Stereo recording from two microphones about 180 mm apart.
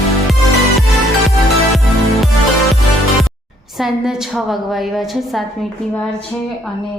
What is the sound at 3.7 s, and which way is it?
A woman's voice, centre (ahead or behind).